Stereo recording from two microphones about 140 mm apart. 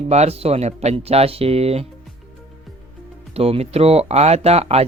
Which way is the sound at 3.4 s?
45° right (ahead or behind).